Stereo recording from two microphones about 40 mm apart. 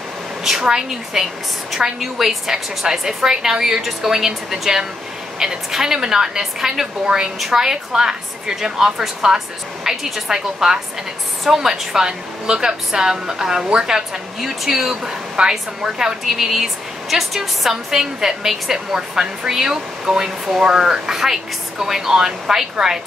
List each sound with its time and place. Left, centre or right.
0.4 s a woman's voice: centre
15.0 s a woman's voice: centre